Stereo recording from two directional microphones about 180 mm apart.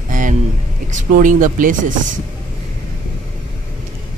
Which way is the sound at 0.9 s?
45° right (ahead or behind).